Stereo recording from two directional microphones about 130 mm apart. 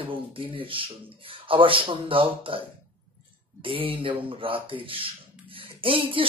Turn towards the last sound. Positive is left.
turn(degrees=-45)  # may be behind; listen again after turning